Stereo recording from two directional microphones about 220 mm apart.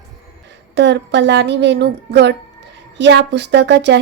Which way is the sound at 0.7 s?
55° right (ahead or behind).